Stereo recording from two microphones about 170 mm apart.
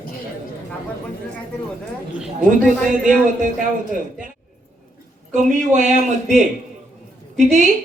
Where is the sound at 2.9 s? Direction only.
50° right (ahead or behind).